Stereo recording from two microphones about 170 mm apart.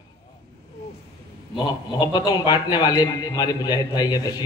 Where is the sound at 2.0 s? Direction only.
25° left (ahead or behind).